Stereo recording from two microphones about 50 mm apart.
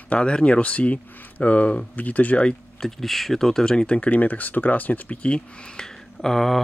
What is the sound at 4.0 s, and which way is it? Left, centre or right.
Speech, left.